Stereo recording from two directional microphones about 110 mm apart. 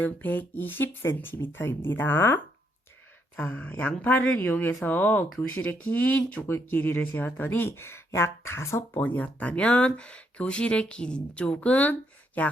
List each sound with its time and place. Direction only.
0.0 s speech: 15° left (ahead or behind)